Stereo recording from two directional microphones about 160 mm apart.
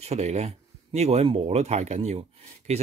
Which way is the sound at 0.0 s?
45° right (ahead or behind).